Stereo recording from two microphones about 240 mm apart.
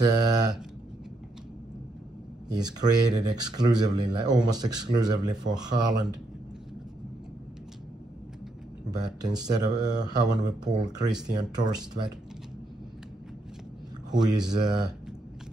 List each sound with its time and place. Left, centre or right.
0.0 s speech: centre
2.5 s speech: centre
8.9 s speech: centre
14.2 s speech: centre